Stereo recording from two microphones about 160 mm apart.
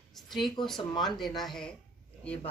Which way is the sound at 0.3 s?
Centre (ahead or behind).